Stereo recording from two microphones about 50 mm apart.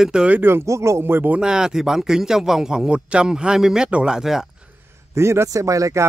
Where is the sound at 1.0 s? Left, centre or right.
Right.